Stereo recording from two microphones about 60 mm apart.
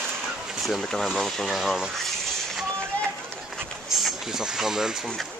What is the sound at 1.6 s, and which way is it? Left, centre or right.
Speech, centre.